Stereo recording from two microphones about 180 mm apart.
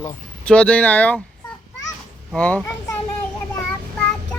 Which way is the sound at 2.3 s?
10° left (ahead or behind).